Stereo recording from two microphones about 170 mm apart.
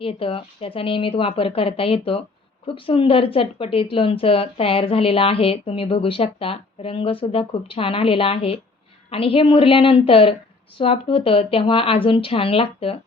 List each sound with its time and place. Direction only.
0.0 s speech: 30° left (ahead or behind)